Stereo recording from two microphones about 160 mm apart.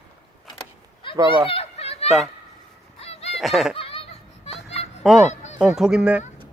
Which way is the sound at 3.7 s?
35° left (ahead or behind).